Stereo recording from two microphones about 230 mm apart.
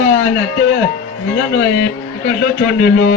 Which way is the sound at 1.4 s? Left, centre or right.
Left.